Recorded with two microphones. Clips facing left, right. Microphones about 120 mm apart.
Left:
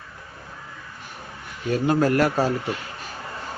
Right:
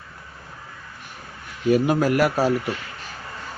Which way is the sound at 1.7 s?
10° right (ahead or behind).